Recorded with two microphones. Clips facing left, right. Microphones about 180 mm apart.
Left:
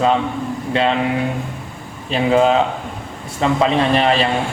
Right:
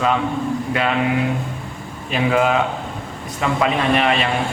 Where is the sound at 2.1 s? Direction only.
30° left (ahead or behind).